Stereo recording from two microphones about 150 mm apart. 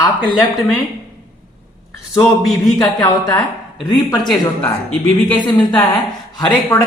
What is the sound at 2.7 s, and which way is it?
Speech, 25° left (ahead or behind).